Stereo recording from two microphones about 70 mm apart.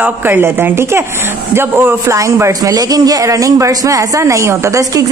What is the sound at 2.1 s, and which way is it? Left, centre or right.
Speech, right.